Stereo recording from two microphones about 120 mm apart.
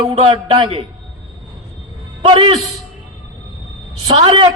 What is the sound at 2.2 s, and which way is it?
Speech, 45° right (ahead or behind).